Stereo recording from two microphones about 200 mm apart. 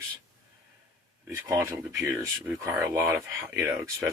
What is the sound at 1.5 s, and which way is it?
Speech, 15° right (ahead or behind).